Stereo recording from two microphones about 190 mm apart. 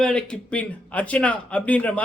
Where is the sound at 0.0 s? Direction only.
5° left (ahead or behind).